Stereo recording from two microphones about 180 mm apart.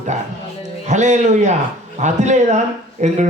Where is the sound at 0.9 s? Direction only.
40° right (ahead or behind).